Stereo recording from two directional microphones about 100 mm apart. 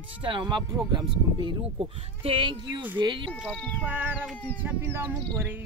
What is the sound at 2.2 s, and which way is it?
Speech, 60° right (ahead or behind).